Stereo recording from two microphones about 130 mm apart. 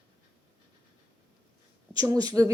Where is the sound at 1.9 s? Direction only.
30° right (ahead or behind).